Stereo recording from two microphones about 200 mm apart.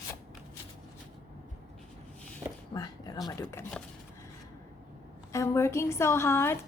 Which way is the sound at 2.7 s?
20° left (ahead or behind).